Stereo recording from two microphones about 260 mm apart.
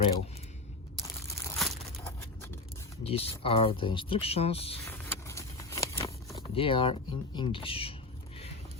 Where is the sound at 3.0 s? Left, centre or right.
Left.